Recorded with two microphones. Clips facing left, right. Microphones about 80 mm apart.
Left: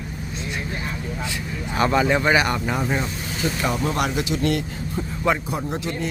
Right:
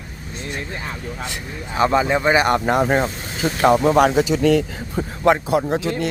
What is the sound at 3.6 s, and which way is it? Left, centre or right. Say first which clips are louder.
Speech: right 11 dB; right.